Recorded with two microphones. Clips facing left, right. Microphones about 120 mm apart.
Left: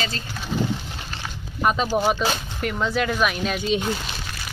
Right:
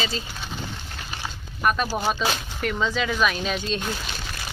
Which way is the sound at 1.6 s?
20° left (ahead or behind).